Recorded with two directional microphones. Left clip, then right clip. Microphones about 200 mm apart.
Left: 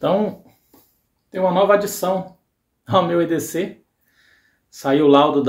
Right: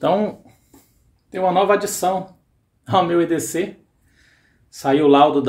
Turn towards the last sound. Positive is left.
turn(degrees=-5)  # may be behind; listen again after turning